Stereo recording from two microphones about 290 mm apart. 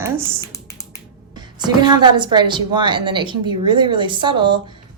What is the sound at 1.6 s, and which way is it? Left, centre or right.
A woman's voice, centre.